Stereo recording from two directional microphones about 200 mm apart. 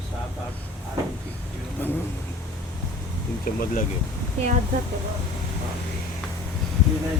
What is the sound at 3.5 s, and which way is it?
Speech, 45° left (ahead or behind).